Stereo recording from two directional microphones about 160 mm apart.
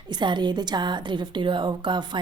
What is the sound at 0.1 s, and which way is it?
A woman's voice, 30° right (ahead or behind).